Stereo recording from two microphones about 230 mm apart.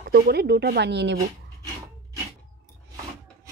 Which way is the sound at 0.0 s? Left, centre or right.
Right.